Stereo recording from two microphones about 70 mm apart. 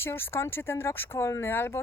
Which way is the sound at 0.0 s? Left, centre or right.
Left.